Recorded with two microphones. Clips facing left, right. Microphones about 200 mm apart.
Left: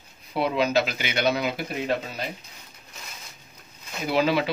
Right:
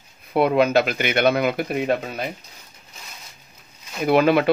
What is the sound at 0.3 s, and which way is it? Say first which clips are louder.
Speech: right 6 dB; 55° right (ahead or behind).